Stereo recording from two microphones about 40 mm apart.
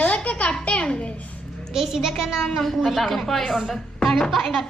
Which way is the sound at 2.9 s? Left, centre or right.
Centre.